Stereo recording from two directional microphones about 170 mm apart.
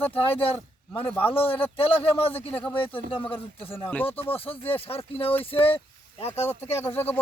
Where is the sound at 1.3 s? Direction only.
35° left (ahead or behind).